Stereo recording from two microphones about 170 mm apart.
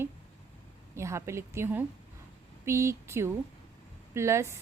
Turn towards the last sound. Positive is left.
turn(degrees=-15)  # may be behind; listen again after turning